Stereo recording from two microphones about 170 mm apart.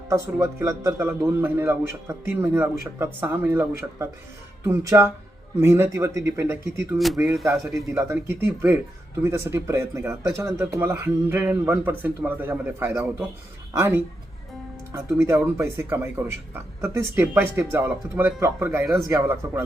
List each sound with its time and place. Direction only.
0.1 s speech: 15° right (ahead or behind)